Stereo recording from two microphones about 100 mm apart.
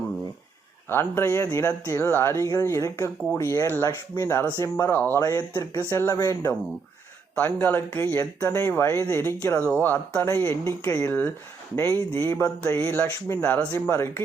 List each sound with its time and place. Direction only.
0.9 s speech: 20° left (ahead or behind)